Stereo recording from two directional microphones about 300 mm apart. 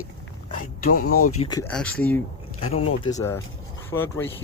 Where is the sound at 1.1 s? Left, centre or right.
Left.